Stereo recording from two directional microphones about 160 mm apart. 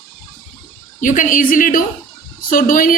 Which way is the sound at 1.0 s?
55° left (ahead or behind).